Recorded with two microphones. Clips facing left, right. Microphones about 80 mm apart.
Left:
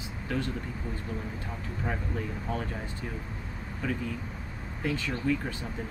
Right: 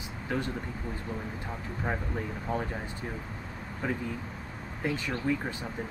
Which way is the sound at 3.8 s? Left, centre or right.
Centre.